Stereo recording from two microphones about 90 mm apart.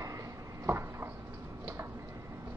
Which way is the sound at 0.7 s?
30° right (ahead or behind).